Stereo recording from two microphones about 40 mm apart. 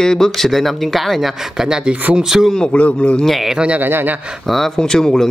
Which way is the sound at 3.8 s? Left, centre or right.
Right.